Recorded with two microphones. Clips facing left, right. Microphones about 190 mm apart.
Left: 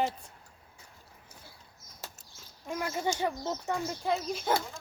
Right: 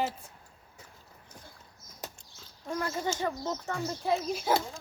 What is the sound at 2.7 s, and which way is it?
Speech, 10° left (ahead or behind).